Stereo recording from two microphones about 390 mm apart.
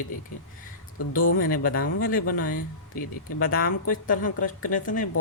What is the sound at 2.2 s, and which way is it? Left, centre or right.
Speech, left.